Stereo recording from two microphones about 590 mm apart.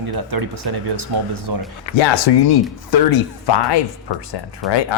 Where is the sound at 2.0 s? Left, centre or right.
Left.